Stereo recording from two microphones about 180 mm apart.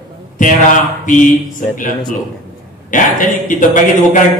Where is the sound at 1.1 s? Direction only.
45° left (ahead or behind).